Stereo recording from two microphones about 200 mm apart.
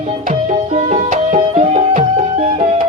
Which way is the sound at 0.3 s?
35° right (ahead or behind).